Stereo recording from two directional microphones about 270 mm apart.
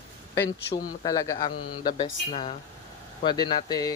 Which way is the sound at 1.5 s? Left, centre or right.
Left.